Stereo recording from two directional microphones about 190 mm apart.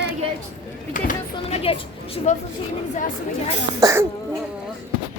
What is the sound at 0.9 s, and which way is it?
Speech, 45° left (ahead or behind).